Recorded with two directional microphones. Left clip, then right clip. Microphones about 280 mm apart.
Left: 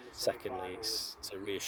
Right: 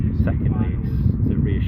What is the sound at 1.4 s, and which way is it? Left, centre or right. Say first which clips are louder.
Speech: right 9 dB; centre.